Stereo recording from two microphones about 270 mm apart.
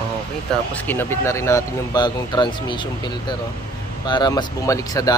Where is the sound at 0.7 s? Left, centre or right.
Centre.